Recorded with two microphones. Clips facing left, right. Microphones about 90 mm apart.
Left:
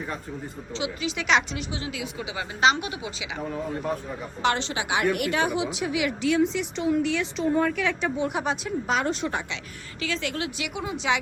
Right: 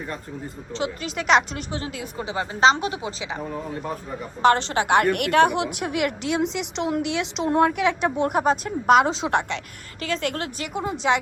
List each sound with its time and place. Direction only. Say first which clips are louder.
0.0 s speech: right 1 dB; centre (ahead or behind)
0.7 s speech: right 2 dB; 45° right (ahead or behind)
3.4 s speech: left 3 dB; 5° right (ahead or behind)
4.4 s a woman's voice: right 7 dB; 50° right (ahead or behind)
6.3 s a woman's voice: left 1 dB; 75° right (ahead or behind)
7.8 s a woman's voice: right 4 dB; 60° right (ahead or behind)
8.9 s a woman's voice: right 9 dB; 85° right
10.0 s speech: right 3 dB; 50° right (ahead or behind)